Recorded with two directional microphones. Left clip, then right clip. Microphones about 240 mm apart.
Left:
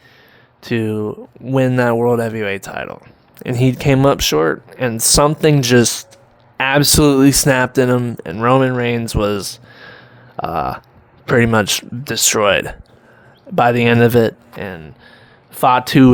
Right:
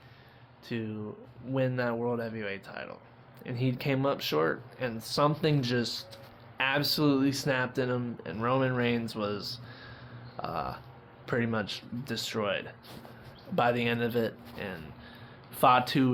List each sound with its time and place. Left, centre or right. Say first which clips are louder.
0.6 s speech: left 18 dB; left